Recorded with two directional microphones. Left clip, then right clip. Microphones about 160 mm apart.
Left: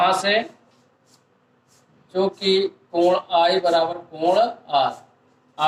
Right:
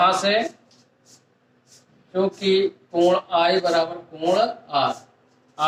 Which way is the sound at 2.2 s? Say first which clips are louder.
Even; 35° right (ahead or behind).